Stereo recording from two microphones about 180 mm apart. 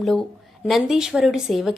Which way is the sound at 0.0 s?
Centre (ahead or behind).